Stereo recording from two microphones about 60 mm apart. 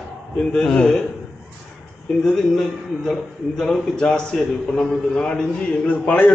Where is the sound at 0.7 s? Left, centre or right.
Centre.